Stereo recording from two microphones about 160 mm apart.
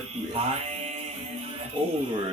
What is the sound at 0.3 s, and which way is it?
Music, 40° right (ahead or behind).